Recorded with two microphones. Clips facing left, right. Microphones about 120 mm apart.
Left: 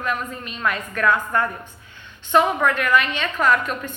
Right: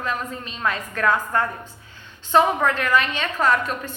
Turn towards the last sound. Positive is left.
turn(degrees=-35)  # may be behind; listen again after turning